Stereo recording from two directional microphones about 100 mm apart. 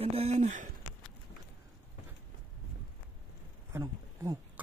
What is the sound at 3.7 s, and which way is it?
Speech, 25° right (ahead or behind).